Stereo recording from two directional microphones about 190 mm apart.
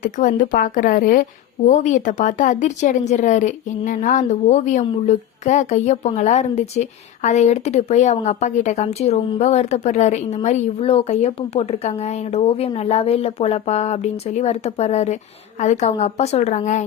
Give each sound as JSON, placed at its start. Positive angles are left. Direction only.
{"t": 0.0, "sound": "speech", "side_deg": 45}